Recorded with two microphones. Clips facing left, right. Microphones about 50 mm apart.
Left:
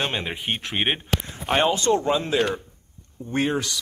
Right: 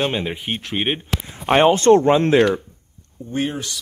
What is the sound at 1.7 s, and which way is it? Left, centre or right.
Speech, right.